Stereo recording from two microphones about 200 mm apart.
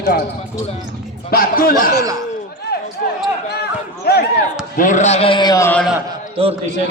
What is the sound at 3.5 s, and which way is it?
Run, 55° left (ahead or behind).